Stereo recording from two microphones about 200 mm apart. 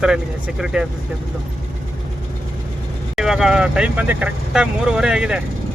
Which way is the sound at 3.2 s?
Centre (ahead or behind).